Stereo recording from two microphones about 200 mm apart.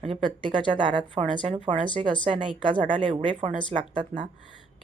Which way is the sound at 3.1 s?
40° right (ahead or behind).